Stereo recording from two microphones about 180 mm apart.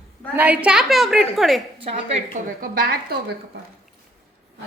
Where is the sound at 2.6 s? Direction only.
55° right (ahead or behind).